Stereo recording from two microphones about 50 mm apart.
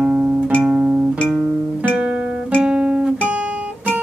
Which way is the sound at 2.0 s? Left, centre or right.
Right.